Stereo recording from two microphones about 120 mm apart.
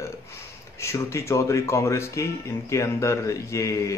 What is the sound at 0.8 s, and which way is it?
Speech, 25° left (ahead or behind).